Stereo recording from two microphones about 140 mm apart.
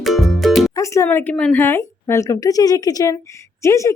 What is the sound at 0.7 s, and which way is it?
Speech, 20° left (ahead or behind).